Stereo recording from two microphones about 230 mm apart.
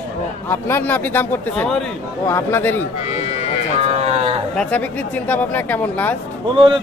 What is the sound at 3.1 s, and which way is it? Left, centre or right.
Speech, left.